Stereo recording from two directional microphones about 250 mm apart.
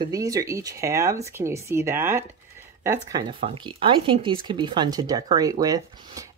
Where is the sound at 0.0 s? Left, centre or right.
Centre.